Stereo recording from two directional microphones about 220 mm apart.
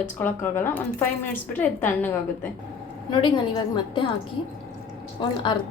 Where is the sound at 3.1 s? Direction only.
20° left (ahead or behind).